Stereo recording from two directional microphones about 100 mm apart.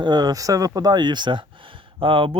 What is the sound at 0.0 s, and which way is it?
Speech, 45° right (ahead or behind).